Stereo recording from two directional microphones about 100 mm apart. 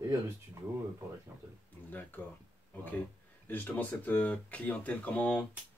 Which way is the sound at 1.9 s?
15° left (ahead or behind).